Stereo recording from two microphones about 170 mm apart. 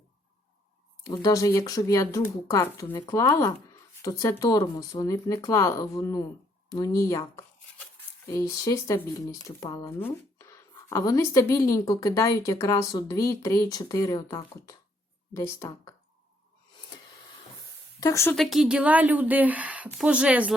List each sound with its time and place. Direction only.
1.0 s speech: 20° left (ahead or behind)
18.0 s speech: 15° left (ahead or behind)
18.3 s a woman's voice: centre (ahead or behind)